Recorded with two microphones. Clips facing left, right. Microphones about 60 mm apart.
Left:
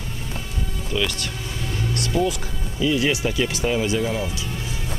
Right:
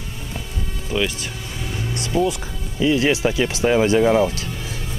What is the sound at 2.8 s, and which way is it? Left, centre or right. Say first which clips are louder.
Speech: right 3 dB; right.